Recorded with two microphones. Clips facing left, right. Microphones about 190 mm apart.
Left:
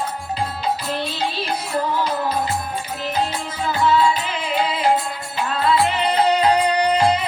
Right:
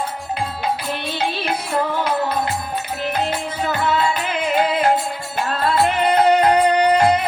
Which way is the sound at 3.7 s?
60° right (ahead or behind).